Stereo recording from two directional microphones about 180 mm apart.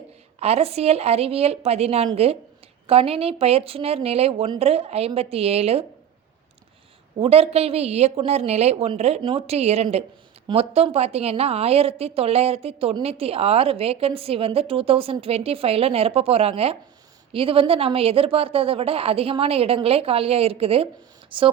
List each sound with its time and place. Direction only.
0.3 s a woman's voice: 35° right (ahead or behind)
7.2 s a woman's voice: 35° right (ahead or behind)